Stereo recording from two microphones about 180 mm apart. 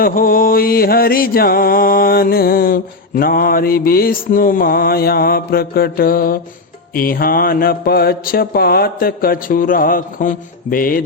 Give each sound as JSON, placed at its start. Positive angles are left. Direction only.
{"t": 0.0, "sound": "mantra", "side_deg": 50}